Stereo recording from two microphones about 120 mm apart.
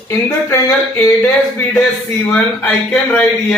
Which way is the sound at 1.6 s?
15° left (ahead or behind).